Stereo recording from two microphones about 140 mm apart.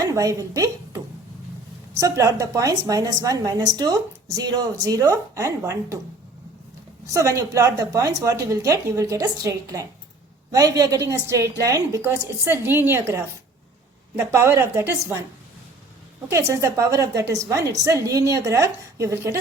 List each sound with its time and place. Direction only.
0.1 s a sound: 25° right (ahead or behind)
2.0 s a woman's voice: 25° right (ahead or behind)
7.1 s a woman's voice: 20° right (ahead or behind)
16.3 s a woman's voice: 20° right (ahead or behind)